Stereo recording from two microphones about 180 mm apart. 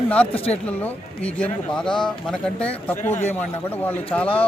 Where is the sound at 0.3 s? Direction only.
30° left (ahead or behind).